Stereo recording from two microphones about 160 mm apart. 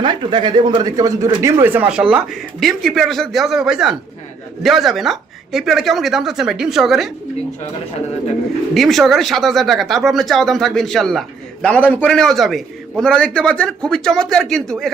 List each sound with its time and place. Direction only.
0.0 s speech: 30° right (ahead or behind); by 7.1 s centre (ahead or behind)
8.7 s speech: centre (ahead or behind)